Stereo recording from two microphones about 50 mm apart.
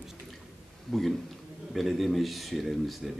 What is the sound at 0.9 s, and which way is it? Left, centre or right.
Speech, centre.